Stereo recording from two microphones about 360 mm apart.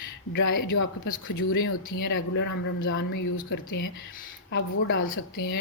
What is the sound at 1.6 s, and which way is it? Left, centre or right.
Speech, left.